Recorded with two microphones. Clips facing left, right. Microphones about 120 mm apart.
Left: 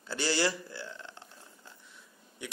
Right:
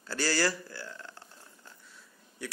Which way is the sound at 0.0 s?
20° left (ahead or behind).